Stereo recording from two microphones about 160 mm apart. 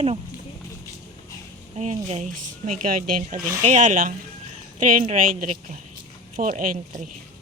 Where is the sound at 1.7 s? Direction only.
45° right (ahead or behind).